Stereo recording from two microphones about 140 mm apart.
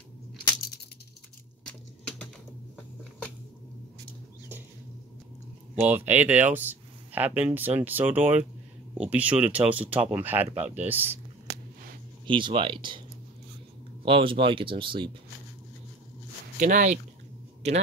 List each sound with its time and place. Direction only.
5.8 s speech: 15° right (ahead or behind)
12.3 s speech: 35° right (ahead or behind)
14.0 s speech: 35° right (ahead or behind)
16.5 s speech: 65° right (ahead or behind)
17.6 s speech: 50° right (ahead or behind)